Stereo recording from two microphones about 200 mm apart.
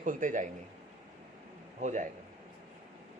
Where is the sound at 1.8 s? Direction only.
35° right (ahead or behind).